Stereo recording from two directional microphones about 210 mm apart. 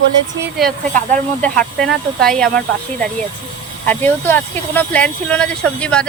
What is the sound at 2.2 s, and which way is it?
Speech, 5° left (ahead or behind).